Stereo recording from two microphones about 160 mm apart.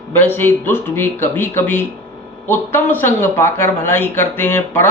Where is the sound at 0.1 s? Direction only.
15° left (ahead or behind).